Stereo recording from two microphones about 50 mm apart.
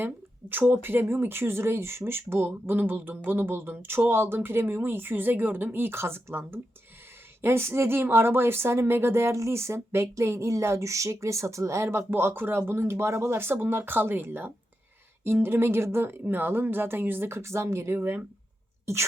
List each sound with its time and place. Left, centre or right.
0.0 s speech: right
17.2 s speech: right
17.9 s speech: right